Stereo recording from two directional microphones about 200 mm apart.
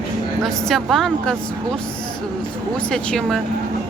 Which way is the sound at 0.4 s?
Centre (ahead or behind).